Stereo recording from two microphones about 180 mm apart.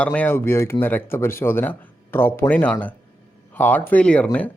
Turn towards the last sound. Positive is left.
turn(degrees=5)  # may be behind; listen again after turning